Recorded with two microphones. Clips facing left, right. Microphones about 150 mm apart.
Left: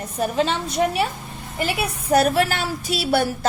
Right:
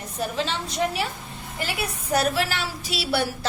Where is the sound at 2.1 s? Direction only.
55° left (ahead or behind).